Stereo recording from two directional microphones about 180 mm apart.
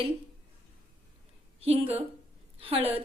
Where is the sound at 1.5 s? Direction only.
35° right (ahead or behind).